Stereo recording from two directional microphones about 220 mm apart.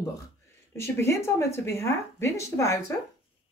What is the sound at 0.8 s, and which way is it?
Speech, 10° left (ahead or behind).